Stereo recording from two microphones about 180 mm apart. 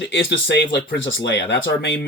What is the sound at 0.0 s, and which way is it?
Speech, 80° left.